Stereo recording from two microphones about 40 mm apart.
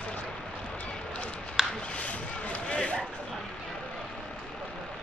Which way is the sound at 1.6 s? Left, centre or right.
Centre.